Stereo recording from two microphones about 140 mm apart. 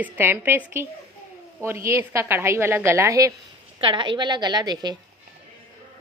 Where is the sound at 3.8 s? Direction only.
35° right (ahead or behind).